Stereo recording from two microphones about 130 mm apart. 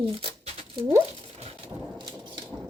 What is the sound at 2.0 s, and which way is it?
Thunder, 35° right (ahead or behind).